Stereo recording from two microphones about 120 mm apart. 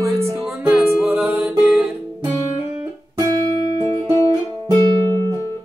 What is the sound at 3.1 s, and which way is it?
Music, 30° right (ahead or behind).